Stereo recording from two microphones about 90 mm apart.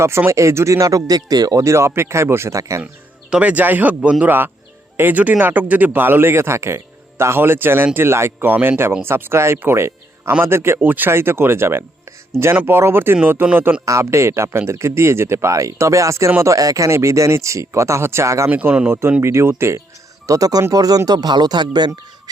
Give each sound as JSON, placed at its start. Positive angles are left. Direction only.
{"t": 0.3, "sound": "speech", "side_deg": -30}
{"t": 2.8, "sound": "speech", "side_deg": -10}
{"t": 13.8, "sound": "speech", "side_deg": -35}
{"t": 18.5, "sound": "speech", "side_deg": -15}
{"t": 19.2, "sound": "speech", "side_deg": -30}
{"t": 20.2, "sound": "speech", "side_deg": -40}